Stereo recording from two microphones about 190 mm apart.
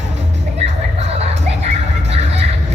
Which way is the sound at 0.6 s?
35° right (ahead or behind).